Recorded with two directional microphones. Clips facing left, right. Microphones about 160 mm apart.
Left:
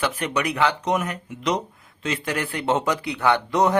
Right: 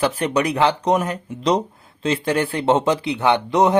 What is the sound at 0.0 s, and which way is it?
Speech, 35° right (ahead or behind).